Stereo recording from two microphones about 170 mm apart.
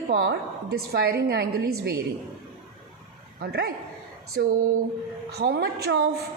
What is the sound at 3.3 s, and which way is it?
A man's voice, 60° right (ahead or behind).